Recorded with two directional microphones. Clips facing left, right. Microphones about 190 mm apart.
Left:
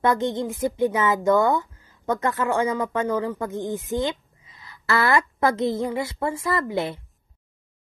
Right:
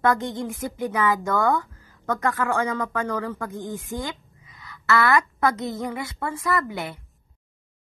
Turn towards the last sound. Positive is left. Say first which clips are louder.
# left 2 dB
turn(degrees=30)  # may be behind; listen again after turning